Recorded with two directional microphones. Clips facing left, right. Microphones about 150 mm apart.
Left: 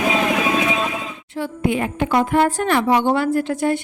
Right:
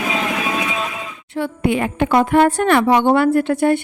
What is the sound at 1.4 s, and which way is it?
A woman's voice, 70° right (ahead or behind).